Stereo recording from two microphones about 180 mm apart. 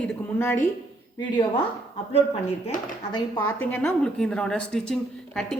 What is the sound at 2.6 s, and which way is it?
Speech, 30° left (ahead or behind).